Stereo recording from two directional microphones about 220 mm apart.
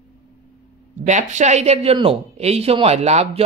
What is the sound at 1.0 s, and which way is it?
Speech, 35° right (ahead or behind).